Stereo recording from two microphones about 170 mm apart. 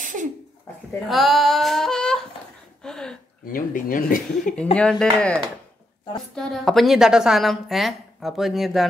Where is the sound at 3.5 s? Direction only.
55° left (ahead or behind).